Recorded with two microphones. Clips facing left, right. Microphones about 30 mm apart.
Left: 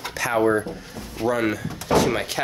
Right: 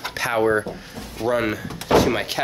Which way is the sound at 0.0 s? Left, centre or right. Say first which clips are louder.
Even; right.